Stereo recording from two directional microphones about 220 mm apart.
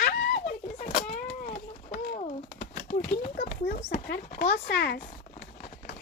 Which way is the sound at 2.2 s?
30° left (ahead or behind).